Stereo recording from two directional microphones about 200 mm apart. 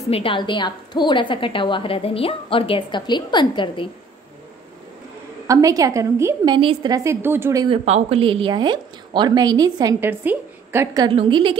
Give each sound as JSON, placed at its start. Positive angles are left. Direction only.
{"t": 0.1, "sound": "a woman's voice", "side_deg": 25}
{"t": 5.5, "sound": "a woman's voice", "side_deg": -15}
{"t": 7.6, "sound": "a woman's voice", "side_deg": -30}
{"t": 11.1, "sound": "a woman's voice", "side_deg": -25}